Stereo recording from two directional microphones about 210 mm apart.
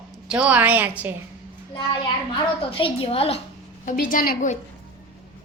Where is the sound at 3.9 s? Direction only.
40° left (ahead or behind).